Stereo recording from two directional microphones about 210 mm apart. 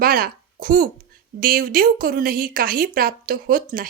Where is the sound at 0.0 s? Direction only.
45° right (ahead or behind).